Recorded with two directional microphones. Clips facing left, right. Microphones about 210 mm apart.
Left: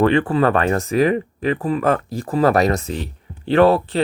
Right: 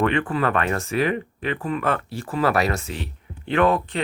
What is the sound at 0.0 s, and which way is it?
Speech, 35° left (ahead or behind).